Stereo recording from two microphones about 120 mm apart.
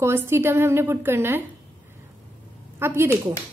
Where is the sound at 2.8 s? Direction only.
20° right (ahead or behind).